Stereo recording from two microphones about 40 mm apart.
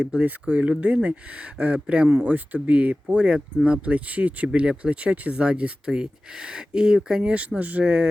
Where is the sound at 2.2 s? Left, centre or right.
Right.